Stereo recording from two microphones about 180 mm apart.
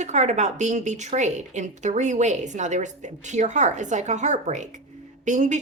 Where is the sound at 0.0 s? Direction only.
40° right (ahead or behind).